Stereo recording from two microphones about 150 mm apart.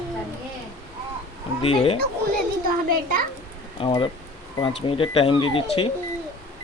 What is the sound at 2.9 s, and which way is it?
Speech, 70° right (ahead or behind).